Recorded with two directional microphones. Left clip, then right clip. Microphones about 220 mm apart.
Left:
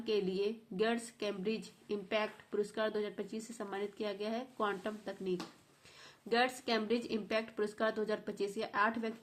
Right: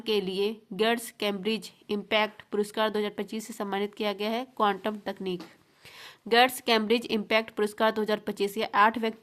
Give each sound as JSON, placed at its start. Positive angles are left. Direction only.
{"t": 0.0, "sound": "speech", "side_deg": -40}